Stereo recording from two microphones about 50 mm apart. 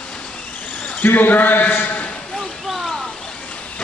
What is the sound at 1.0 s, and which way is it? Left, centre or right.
A man's voice, left.